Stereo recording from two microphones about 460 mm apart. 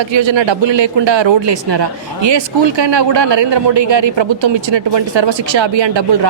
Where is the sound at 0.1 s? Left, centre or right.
Right.